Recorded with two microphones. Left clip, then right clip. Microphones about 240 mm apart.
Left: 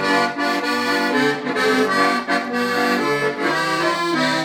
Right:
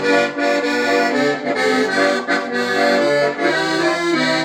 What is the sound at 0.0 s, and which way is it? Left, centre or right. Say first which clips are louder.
Accordion: right 2 dB; centre.